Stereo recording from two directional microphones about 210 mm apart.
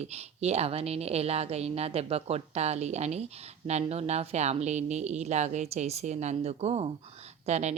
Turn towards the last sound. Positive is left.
turn(degrees=-30)  # may be behind; listen again after turning